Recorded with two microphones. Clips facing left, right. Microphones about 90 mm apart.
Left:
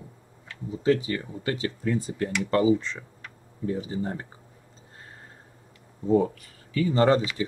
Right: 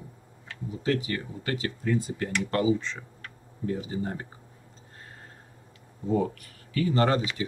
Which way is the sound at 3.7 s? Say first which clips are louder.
Left 2 dB; 35° left (ahead or behind).